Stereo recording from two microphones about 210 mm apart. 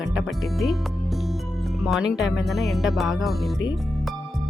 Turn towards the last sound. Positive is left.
turn(degrees=0)  # may be behind; listen again after turning